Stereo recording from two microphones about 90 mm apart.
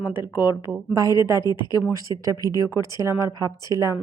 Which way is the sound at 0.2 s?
55° left (ahead or behind).